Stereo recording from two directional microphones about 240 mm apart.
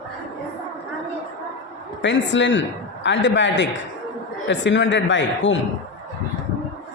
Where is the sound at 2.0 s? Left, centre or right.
Left.